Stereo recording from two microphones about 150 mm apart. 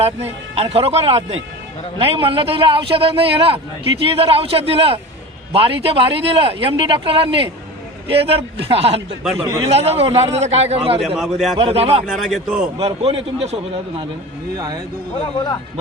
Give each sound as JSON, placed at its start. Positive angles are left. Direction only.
{"t": 0.0, "sound": "speech", "side_deg": -40}
{"t": 11.0, "sound": "a man's voice", "side_deg": 0}
{"t": 11.5, "sound": "speech", "side_deg": -40}
{"t": 12.0, "sound": "a man's voice", "side_deg": -5}
{"t": 12.8, "sound": "speech", "side_deg": -40}